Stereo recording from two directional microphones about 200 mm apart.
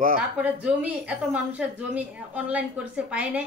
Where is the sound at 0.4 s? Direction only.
5° right (ahead or behind).